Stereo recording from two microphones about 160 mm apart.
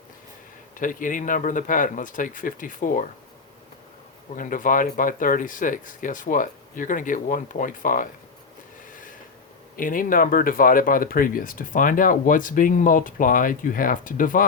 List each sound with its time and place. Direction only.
0.8 s speech: 55° left (ahead or behind)
4.4 s speech: 55° left (ahead or behind)
8.9 s a sound: 55° left (ahead or behind)
9.7 s speech: 60° left (ahead or behind)